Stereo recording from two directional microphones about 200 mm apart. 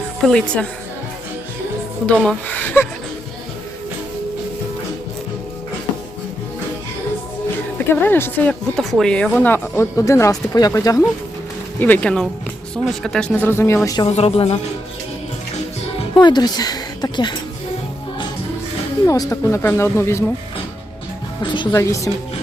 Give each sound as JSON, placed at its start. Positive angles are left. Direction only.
{"t": 0.3, "sound": "a woman's voice", "side_deg": 5}
{"t": 2.0, "sound": "speech", "side_deg": 5}
{"t": 7.8, "sound": "speech", "side_deg": 10}
{"t": 16.1, "sound": "a woman's voice", "side_deg": 20}
{"t": 19.0, "sound": "speech", "side_deg": 15}
{"t": 21.5, "sound": "speech", "side_deg": 20}